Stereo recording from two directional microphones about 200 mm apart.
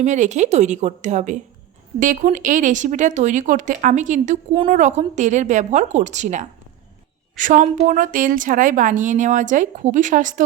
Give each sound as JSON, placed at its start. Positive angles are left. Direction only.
{"t": 0.0, "sound": "a woman's voice", "side_deg": -35}